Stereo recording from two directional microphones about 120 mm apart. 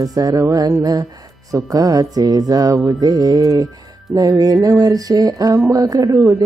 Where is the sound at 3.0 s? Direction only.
30° right (ahead or behind).